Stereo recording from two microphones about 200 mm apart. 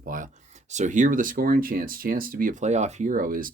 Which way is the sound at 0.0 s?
40° right (ahead or behind).